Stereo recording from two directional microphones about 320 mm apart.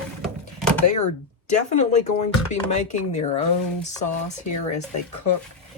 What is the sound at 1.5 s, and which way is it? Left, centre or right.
Speech, left.